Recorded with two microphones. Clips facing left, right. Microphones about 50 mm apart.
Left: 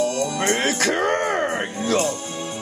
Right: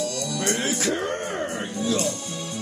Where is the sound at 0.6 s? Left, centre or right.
Left.